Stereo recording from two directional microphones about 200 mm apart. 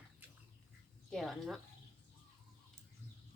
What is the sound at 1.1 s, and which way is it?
Speech, centre (ahead or behind).